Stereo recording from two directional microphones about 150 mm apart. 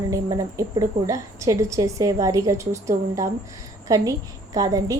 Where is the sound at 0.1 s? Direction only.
20° right (ahead or behind).